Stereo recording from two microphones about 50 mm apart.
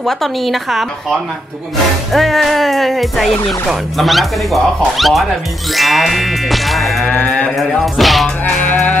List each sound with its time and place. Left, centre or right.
0.0 s music: centre
7.1 s mantra: left
7.8 s music: centre
8.5 s mantra: left